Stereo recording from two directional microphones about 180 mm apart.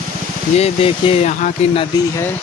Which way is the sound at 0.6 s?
30° left (ahead or behind).